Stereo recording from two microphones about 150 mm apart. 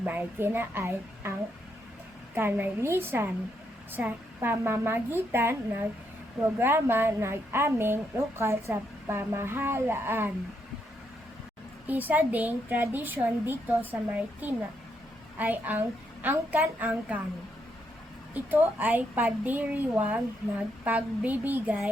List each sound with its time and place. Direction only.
0.0 s a woman's voice: 15° right (ahead or behind)
2.3 s a woman's voice: 15° right (ahead or behind)
11.9 s a woman's voice: 10° right (ahead or behind)
18.5 s a woman's voice: 10° right (ahead or behind)